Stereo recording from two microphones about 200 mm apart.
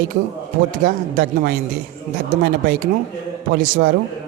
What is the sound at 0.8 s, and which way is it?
Speech, 45° right (ahead or behind).